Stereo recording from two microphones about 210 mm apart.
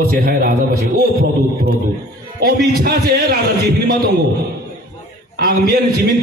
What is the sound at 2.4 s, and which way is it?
Speech, 45° right (ahead or behind).